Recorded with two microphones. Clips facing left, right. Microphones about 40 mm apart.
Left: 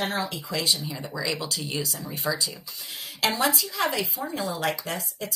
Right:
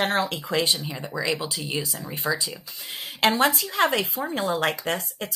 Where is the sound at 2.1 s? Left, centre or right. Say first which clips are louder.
Right 3 dB; right.